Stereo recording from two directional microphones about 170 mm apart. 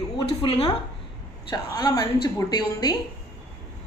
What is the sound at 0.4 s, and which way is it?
Speech, 35° left (ahead or behind).